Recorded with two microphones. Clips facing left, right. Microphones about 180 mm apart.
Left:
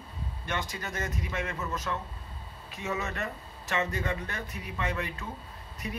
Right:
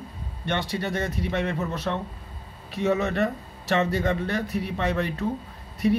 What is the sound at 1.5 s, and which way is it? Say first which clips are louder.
Speech: right 7 dB; 65° right (ahead or behind).